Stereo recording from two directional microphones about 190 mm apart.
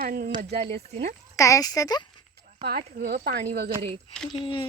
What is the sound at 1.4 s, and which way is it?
Speech, 15° left (ahead or behind).